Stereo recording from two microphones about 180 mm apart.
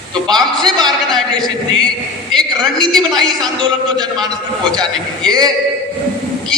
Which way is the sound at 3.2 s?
25° right (ahead or behind).